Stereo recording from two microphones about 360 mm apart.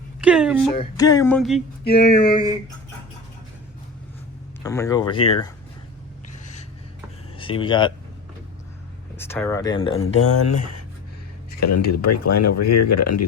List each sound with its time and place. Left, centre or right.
0.2 s a sound: centre
0.8 s speech: centre
1.8 s a sound: left
4.6 s speech: centre
6.4 s snort: centre
7.3 s speech: centre
9.1 s speech: centre
10.2 s speech: left
11.9 s speech: left